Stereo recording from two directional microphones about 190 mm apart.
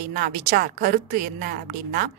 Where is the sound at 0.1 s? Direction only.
50° right (ahead or behind).